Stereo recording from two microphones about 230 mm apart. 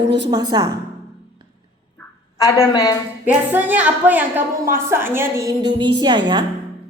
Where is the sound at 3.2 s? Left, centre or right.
Centre.